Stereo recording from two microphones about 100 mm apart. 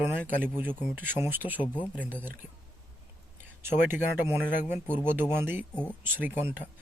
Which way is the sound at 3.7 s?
20° right (ahead or behind).